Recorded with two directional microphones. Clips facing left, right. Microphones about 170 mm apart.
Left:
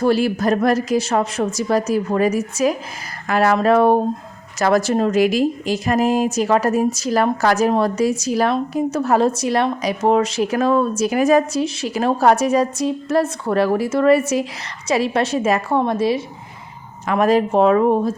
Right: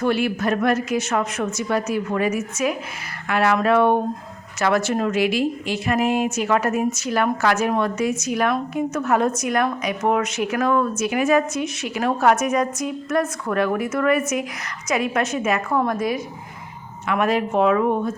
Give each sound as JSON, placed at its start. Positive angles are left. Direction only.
{"t": 0.0, "sound": "a woman's voice", "side_deg": 35}